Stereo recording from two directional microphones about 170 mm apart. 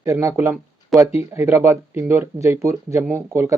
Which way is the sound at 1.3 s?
15° right (ahead or behind).